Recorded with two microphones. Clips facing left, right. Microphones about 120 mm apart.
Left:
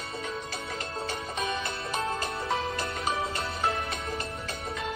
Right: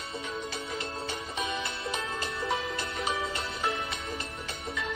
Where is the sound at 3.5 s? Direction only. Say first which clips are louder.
Left 3 dB; 55° left (ahead or behind).